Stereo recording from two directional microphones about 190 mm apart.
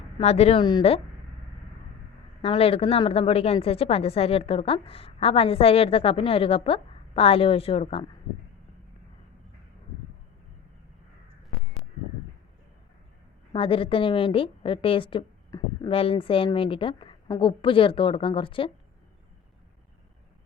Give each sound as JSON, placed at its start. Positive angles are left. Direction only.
{"t": 0.2, "sound": "a woman's voice", "side_deg": 35}
{"t": 2.4, "sound": "a woman's voice", "side_deg": 30}
{"t": 13.5, "sound": "a woman's voice", "side_deg": 30}